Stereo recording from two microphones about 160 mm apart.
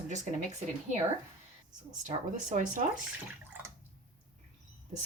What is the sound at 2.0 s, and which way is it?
Speech, 50° right (ahead or behind).